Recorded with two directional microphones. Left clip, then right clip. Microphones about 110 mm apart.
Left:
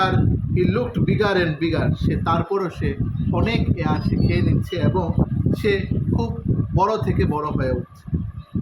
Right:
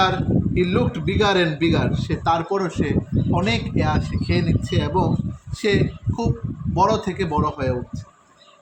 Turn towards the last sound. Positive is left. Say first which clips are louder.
# right 1 dB
turn(degrees=-15)  # may be behind; listen again after turning